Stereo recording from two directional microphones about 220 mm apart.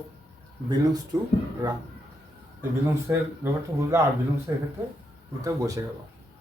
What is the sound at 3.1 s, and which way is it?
Speech, 10° right (ahead or behind).